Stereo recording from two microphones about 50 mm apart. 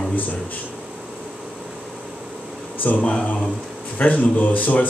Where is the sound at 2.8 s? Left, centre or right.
Left.